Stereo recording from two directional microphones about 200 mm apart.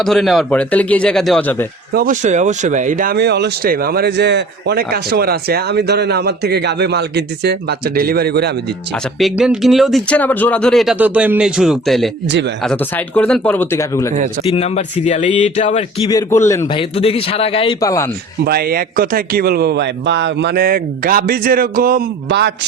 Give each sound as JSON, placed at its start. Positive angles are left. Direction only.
{"t": 0.0, "sound": "speech", "side_deg": 0}
{"t": 1.9, "sound": "speech", "side_deg": -45}
{"t": 9.1, "sound": "speech", "side_deg": 0}
{"t": 14.5, "sound": "speech", "side_deg": 35}
{"t": 16.0, "sound": "speech", "side_deg": 15}
{"t": 16.7, "sound": "a man's voice", "side_deg": 30}
{"t": 17.7, "sound": "speech", "side_deg": 15}
{"t": 18.4, "sound": "speech", "side_deg": -50}